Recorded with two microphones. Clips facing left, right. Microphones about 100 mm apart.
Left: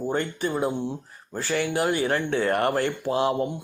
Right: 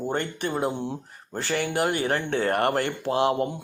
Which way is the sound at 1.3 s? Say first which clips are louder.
Left 1 dB; 60° right (ahead or behind).